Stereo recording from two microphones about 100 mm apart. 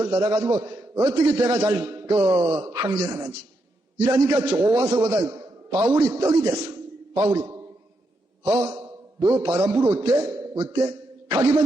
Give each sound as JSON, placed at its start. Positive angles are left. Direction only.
{"t": 0.0, "sound": "a man's voice", "side_deg": -35}
{"t": 8.4, "sound": "a man's voice", "side_deg": -35}